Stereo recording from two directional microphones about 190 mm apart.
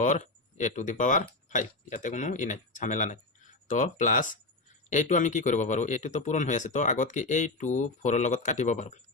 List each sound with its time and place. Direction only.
0.0 s speech: 40° left (ahead or behind)